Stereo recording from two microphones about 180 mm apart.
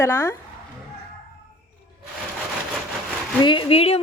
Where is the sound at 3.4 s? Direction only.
25° left (ahead or behind).